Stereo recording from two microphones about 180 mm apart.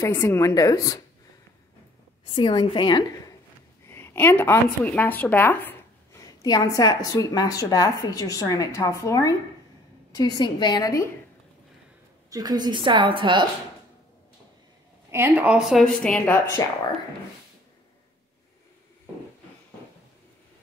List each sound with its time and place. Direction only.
0.0 s speech: 15° left (ahead or behind)
2.3 s a woman's voice: 25° left (ahead or behind)
3.9 s speech: 15° left (ahead or behind)
6.4 s a woman's voice: 20° left (ahead or behind)
12.3 s a woman's voice: 20° right (ahead or behind)
15.0 s a woman's voice: 15° right (ahead or behind); by 16.3 s 5° left (ahead or behind)